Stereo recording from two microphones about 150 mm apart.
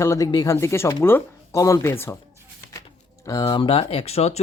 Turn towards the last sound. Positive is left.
turn(degrees=45)  # may be behind; listen again after turning